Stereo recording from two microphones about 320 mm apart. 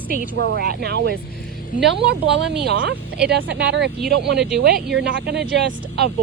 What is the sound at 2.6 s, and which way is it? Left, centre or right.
Speech, right.